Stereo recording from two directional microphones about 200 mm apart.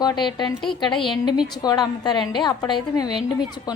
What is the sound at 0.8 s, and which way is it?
A woman's voice, 25° left (ahead or behind).